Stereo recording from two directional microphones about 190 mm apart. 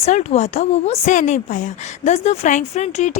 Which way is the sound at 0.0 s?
35° left (ahead or behind).